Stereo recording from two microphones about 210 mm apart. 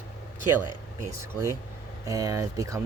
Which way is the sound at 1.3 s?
10° right (ahead or behind).